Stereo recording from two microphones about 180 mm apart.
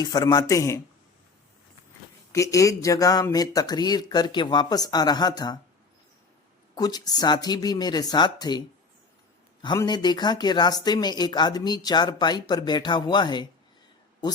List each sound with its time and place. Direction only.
0.0 s speech: 20° left (ahead or behind)
2.3 s speech: 15° left (ahead or behind)
6.7 s speech: 20° left (ahead or behind)